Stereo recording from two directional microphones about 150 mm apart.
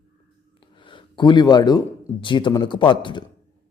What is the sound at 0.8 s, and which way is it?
Speech, 35° left (ahead or behind).